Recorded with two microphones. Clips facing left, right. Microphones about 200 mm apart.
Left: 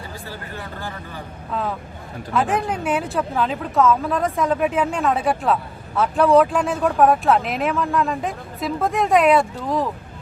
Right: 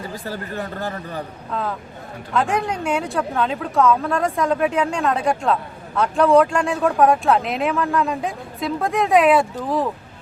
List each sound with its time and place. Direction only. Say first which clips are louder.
0.0 s speech: right 5 dB; 45° right (ahead or behind)
2.3 s speech: even; 5° left (ahead or behind)